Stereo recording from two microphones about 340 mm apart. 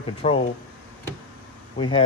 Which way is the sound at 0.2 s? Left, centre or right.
Centre.